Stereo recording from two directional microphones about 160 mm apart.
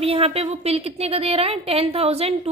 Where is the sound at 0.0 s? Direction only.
35° right (ahead or behind).